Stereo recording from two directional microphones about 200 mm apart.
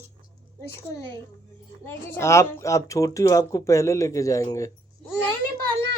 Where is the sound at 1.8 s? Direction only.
10° left (ahead or behind).